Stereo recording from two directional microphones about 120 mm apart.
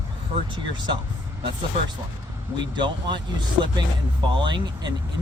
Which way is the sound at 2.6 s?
40° right (ahead or behind).